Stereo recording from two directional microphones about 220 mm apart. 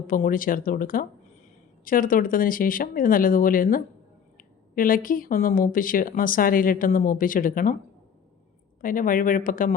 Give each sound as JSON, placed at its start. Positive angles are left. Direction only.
{"t": 0.1, "sound": "speech", "side_deg": 40}
{"t": 8.8, "sound": "speech", "side_deg": 40}